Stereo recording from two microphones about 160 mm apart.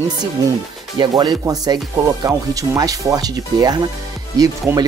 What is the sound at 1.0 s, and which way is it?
Speech, 25° right (ahead or behind).